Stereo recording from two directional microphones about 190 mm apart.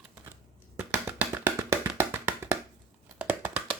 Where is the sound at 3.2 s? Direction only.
10° right (ahead or behind).